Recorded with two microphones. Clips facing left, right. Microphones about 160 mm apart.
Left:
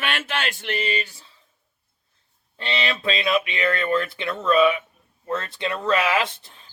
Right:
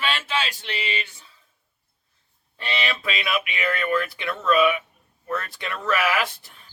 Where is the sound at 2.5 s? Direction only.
25° left (ahead or behind).